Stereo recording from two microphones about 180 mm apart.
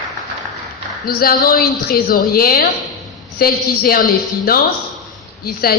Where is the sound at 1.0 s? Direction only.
55° left (ahead or behind).